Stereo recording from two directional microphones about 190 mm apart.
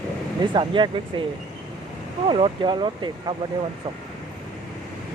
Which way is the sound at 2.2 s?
25° right (ahead or behind).